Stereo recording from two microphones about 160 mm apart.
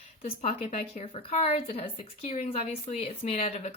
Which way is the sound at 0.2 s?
40° left (ahead or behind).